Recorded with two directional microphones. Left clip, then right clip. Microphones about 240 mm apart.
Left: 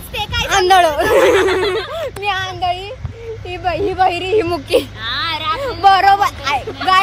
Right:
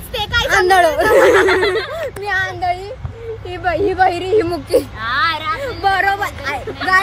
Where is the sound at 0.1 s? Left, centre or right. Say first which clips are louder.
Right 3 dB; centre.